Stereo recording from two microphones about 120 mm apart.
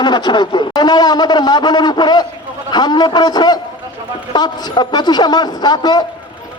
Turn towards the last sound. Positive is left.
turn(degrees=35)  # may be behind; listen again after turning